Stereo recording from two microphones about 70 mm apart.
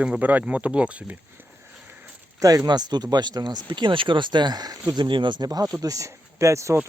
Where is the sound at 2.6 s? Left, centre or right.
Right.